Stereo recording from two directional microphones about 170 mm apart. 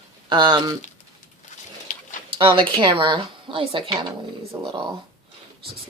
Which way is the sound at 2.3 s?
30° right (ahead or behind).